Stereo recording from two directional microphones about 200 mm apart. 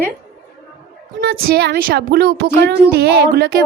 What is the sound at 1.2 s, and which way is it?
A woman's voice, 50° right (ahead or behind).